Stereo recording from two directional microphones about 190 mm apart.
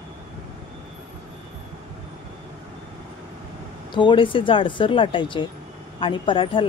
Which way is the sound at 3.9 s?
25° left (ahead or behind).